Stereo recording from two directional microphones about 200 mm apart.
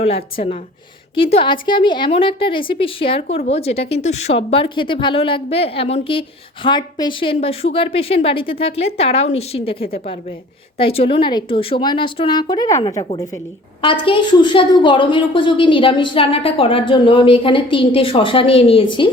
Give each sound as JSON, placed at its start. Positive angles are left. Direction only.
{"t": 0.0, "sound": "a woman's voice", "side_deg": 30}
{"t": 10.8, "sound": "a woman's voice", "side_deg": 30}